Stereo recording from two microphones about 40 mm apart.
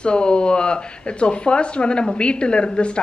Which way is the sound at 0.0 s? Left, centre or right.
Left.